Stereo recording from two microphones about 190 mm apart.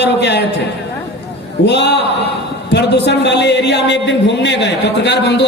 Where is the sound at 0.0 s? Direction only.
65° left (ahead or behind).